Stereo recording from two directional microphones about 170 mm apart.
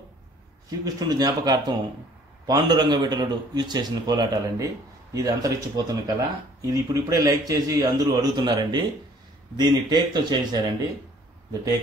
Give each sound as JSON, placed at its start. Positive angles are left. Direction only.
{"t": 0.7, "sound": "speech", "side_deg": -20}